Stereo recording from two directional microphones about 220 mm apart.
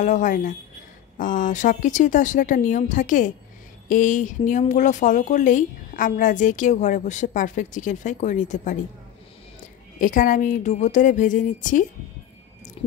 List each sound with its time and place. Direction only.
0.0 s speech: 35° left (ahead or behind)
9.9 s speech: 35° left (ahead or behind)